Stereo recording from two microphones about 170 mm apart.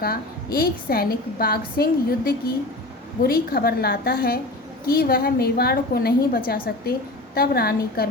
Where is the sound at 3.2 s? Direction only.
65° left (ahead or behind).